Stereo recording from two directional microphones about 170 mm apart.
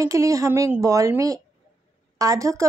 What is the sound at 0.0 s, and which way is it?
A woman's voice, 20° right (ahead or behind).